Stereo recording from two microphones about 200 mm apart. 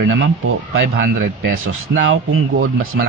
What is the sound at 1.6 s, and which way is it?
A man's voice, 85° right.